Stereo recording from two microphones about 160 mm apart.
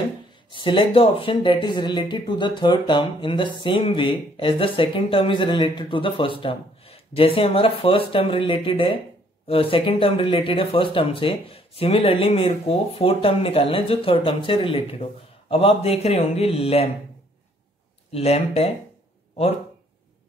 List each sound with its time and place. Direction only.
0.5 s speech: 30° left (ahead or behind)
18.1 s speech: 40° left (ahead or behind)